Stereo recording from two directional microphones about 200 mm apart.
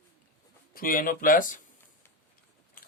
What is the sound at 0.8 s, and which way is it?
Speech, 45° left (ahead or behind).